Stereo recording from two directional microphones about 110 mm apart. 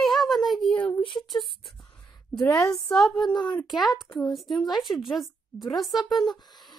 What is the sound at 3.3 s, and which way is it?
Speech, 40° left (ahead or behind).